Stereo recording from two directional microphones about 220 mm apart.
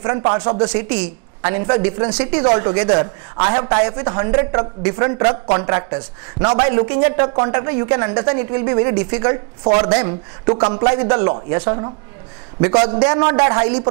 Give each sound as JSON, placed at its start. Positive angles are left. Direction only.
{"t": 0.0, "sound": "a man's voice", "side_deg": -20}